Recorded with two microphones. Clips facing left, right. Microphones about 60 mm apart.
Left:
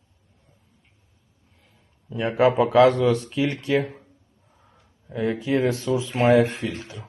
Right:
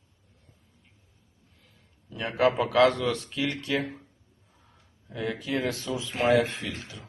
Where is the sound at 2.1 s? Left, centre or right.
Left.